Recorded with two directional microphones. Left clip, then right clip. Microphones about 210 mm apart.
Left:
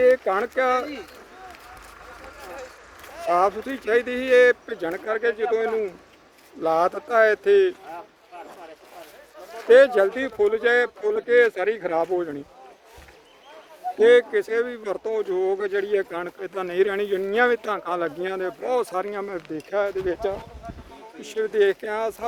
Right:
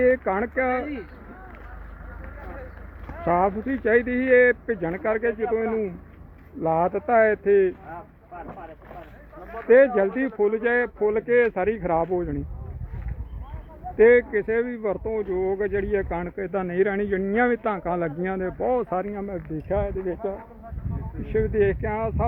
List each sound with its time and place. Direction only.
0.0 s speech: 15° left (ahead or behind)
3.2 s speech: 20° left (ahead or behind)
6.6 s speech: 20° left (ahead or behind)
9.6 s speech: 20° left (ahead or behind)
14.0 s speech: 20° left (ahead or behind)